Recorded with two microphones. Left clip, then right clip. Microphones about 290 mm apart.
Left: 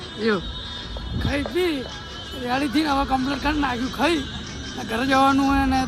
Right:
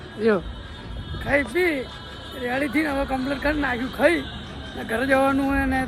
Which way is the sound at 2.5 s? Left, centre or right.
Centre.